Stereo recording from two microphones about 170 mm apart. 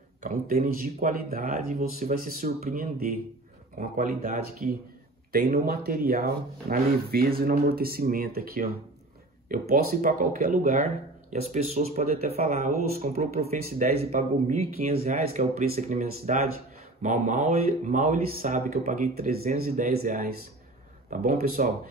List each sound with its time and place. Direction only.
0.2 s speech: 60° right (ahead or behind)
14.5 s speech: 35° right (ahead or behind); by 21.6 s 55° right (ahead or behind)